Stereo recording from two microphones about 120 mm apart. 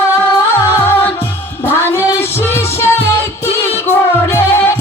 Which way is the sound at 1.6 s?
20° left (ahead or behind).